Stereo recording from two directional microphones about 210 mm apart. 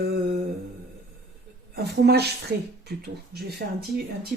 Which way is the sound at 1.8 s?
50° right (ahead or behind).